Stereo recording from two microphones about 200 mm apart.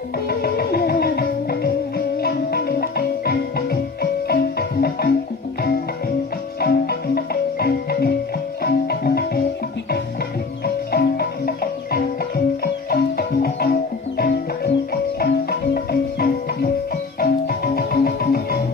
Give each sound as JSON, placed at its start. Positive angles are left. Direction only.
{"t": 0.3, "sound": "music", "side_deg": 50}
{"t": 6.6, "sound": "music", "side_deg": 50}
{"t": 10.6, "sound": "music", "side_deg": 50}
{"t": 15.7, "sound": "music", "side_deg": 45}